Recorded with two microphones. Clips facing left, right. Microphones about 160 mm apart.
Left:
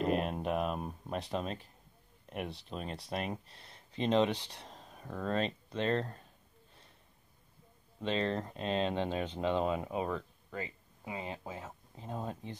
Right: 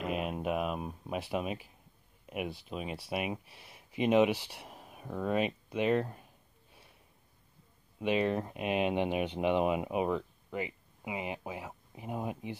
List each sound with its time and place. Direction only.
0.0 s speech: 5° right (ahead or behind)
8.0 s speech: 10° right (ahead or behind)